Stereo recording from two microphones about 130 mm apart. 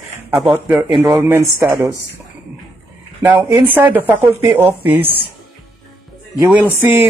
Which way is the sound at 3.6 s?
15° right (ahead or behind).